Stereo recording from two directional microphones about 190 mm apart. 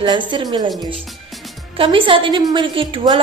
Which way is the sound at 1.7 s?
25° right (ahead or behind).